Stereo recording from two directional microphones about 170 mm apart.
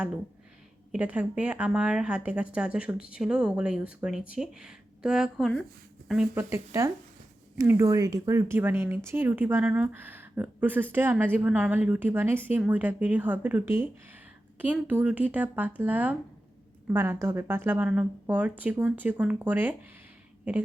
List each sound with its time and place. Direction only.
0.9 s a woman's voice: 5° right (ahead or behind)
6.5 s a woman's voice: 15° right (ahead or behind)